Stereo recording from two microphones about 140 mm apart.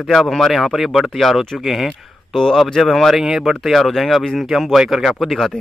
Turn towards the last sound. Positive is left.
turn(degrees=0)  # may be behind; listen again after turning